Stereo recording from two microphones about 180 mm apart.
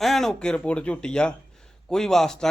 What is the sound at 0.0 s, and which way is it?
A man's voice, centre (ahead or behind).